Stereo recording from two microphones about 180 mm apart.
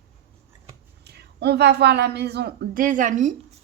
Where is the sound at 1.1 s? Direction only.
65° right (ahead or behind); by 3.4 s 45° right (ahead or behind).